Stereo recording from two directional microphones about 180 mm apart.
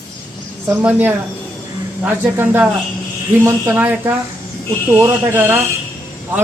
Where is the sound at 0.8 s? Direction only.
10° right (ahead or behind).